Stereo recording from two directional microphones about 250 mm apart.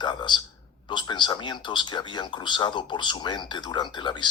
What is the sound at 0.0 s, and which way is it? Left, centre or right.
A man's voice, centre.